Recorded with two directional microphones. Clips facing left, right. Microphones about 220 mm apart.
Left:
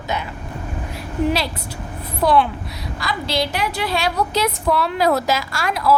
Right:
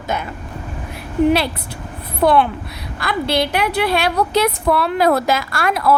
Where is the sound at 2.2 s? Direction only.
55° right (ahead or behind).